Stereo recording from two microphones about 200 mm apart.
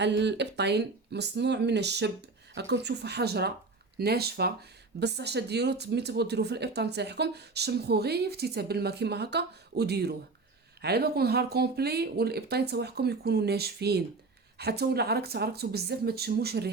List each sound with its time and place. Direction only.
0.0 s speech: 60° right (ahead or behind)